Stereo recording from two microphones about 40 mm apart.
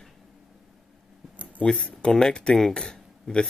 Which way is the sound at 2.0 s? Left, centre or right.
Centre.